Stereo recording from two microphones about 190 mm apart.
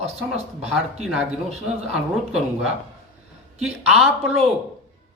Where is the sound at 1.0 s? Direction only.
Centre (ahead or behind).